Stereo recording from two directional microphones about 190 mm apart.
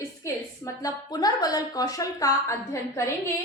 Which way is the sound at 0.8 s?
20° left (ahead or behind).